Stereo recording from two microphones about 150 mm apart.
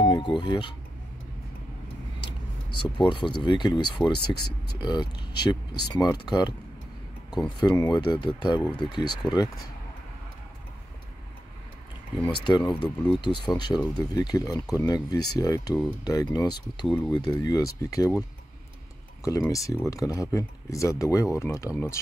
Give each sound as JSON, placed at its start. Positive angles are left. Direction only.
{"t": 0.0, "sound": "speech", "side_deg": 30}
{"t": 2.7, "sound": "speech", "side_deg": 35}
{"t": 12.4, "sound": "speech", "side_deg": 30}
{"t": 12.7, "sound": "speech", "side_deg": 5}
{"t": 13.6, "sound": "speech", "side_deg": 30}
{"t": 16.8, "sound": "speech", "side_deg": 0}
{"t": 17.1, "sound": "speech", "side_deg": 25}
{"t": 19.2, "sound": "speech", "side_deg": 20}